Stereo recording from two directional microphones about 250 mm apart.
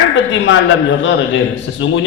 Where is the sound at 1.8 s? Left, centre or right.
Left.